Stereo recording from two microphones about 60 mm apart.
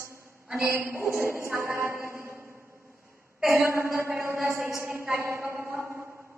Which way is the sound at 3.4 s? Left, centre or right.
Right.